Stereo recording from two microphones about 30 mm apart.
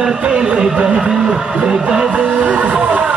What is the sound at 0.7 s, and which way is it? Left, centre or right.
Music, right.